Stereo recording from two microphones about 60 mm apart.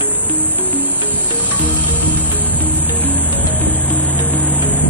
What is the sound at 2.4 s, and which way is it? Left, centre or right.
Music, left.